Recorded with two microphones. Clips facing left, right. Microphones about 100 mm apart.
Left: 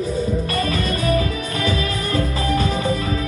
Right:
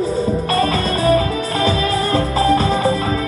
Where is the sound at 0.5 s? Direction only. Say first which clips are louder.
Right 4 dB; 35° right (ahead or behind).